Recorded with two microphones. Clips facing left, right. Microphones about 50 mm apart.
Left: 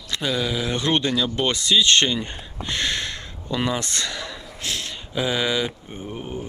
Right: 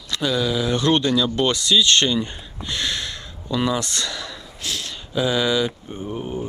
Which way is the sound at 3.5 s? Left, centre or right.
Left.